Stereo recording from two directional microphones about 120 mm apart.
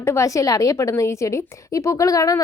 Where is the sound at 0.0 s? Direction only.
25° left (ahead or behind).